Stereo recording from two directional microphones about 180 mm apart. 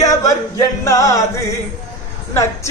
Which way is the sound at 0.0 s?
20° left (ahead or behind).